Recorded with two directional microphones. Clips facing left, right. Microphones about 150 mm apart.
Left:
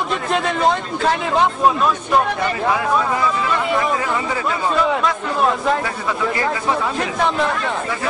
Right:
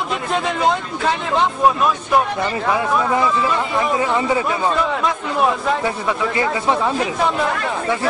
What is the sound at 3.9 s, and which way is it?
Speech, 20° right (ahead or behind).